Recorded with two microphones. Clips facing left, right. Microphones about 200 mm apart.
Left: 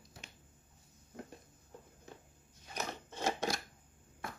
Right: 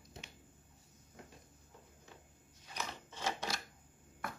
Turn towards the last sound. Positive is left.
turn(degrees=50)  # may be behind; listen again after turning